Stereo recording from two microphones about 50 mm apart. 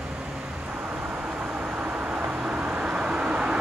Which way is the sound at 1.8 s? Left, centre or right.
Right.